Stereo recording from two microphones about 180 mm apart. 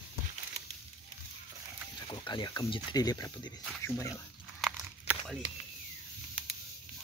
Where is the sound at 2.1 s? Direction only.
25° left (ahead or behind).